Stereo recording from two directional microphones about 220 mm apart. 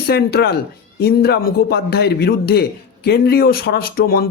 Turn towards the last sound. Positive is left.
turn(degrees=45)  # may be behind; listen again after turning